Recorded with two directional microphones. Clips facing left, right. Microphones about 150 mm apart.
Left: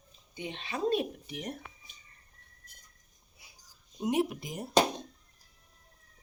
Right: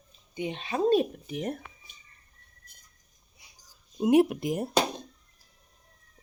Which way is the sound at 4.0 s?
60° right (ahead or behind).